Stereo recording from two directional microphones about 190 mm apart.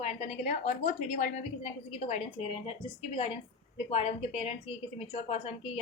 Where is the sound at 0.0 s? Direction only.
30° left (ahead or behind).